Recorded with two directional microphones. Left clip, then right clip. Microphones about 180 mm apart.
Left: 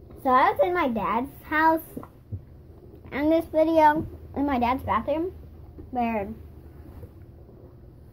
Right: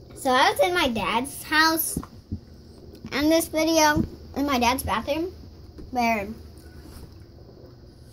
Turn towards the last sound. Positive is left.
turn(degrees=-70)  # may be behind; listen again after turning